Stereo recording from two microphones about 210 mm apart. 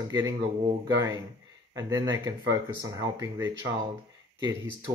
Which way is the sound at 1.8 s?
15° right (ahead or behind).